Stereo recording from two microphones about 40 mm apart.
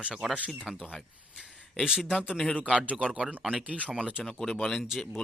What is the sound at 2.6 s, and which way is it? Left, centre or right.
A man's voice, right.